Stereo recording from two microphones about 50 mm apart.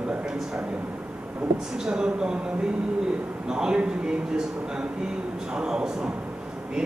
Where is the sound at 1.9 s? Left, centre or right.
Centre.